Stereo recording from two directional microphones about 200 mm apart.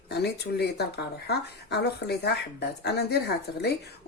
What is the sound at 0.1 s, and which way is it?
Speech, 55° left (ahead or behind).